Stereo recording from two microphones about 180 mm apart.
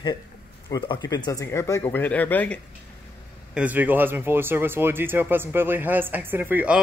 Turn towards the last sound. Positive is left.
turn(degrees=-10)  # may be behind; listen again after turning